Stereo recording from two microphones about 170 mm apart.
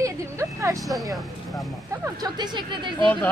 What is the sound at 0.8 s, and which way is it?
Speech, centre (ahead or behind).